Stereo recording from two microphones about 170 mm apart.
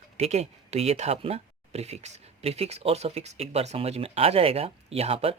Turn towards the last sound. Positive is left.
turn(degrees=-35)  # may be behind; listen again after turning